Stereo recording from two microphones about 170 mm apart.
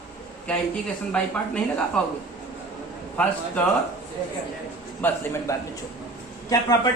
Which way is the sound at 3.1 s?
10° left (ahead or behind).